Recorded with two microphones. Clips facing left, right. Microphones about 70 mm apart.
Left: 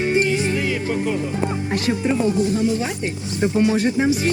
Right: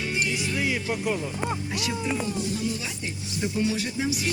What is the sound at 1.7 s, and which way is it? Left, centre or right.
Music, left.